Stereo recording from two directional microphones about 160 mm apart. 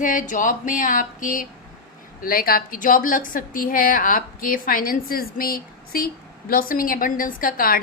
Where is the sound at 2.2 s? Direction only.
65° left (ahead or behind).